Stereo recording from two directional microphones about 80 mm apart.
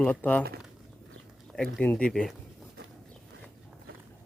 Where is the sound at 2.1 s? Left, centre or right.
Centre.